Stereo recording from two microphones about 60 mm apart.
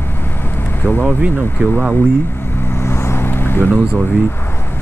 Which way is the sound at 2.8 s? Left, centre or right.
Left.